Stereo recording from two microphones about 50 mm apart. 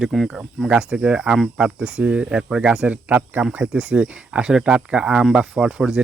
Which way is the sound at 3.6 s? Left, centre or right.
Right.